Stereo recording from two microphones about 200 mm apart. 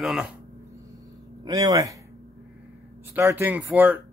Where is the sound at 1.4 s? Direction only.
15° right (ahead or behind).